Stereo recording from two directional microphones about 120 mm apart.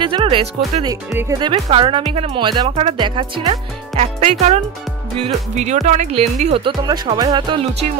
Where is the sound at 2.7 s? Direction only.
60° right (ahead or behind).